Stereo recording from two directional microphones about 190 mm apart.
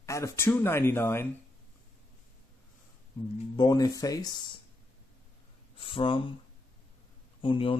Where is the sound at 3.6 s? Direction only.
20° left (ahead or behind).